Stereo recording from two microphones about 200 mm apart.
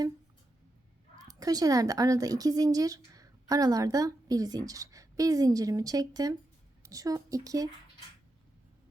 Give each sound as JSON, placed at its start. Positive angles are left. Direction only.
{"t": 1.2, "sound": "a woman's voice", "side_deg": -20}